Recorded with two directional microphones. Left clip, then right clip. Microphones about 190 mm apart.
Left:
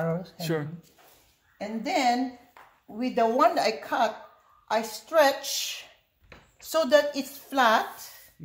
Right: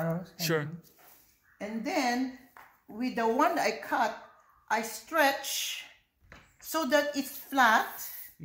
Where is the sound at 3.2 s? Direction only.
45° left (ahead or behind).